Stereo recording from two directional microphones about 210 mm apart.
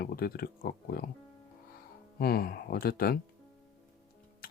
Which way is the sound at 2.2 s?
45° left (ahead or behind).